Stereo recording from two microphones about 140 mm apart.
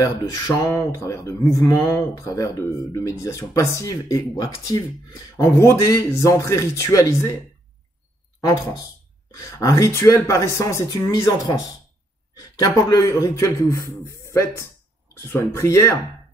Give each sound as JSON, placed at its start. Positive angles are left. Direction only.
{"t": 0.0, "sound": "speech", "side_deg": 20}
{"t": 9.3, "sound": "speech", "side_deg": 25}